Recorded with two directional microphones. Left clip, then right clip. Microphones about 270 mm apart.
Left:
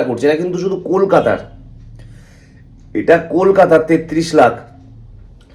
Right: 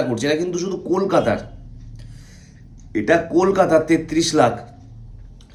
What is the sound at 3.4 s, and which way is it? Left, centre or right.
Speech, centre.